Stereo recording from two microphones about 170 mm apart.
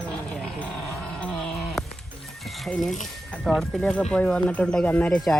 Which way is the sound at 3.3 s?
Centre (ahead or behind).